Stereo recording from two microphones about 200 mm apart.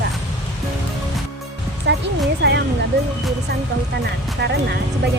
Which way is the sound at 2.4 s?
60° right (ahead or behind).